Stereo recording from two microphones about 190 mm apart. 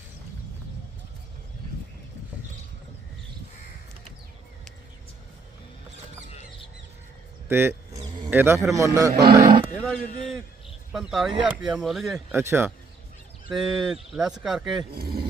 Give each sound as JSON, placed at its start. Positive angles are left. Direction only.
{"t": 7.4, "sound": "speech", "side_deg": -10}
{"t": 8.0, "sound": "a sound", "side_deg": -25}
{"t": 8.3, "sound": "a man's voice", "side_deg": -10}
{"t": 9.7, "sound": "speech", "side_deg": 5}
{"t": 12.3, "sound": "a man's voice", "side_deg": -10}
{"t": 14.9, "sound": "speech", "side_deg": -55}